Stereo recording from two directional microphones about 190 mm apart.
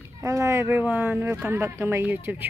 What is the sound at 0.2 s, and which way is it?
Speech, 15° right (ahead or behind).